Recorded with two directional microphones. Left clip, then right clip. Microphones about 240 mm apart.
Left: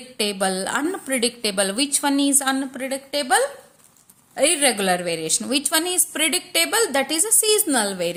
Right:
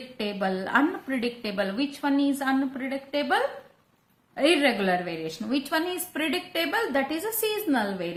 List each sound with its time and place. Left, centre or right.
0.2 s a woman's voice: left